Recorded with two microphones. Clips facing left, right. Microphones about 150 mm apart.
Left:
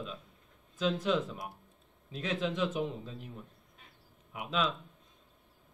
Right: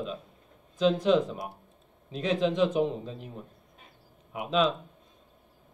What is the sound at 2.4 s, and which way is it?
Speech, 30° right (ahead or behind).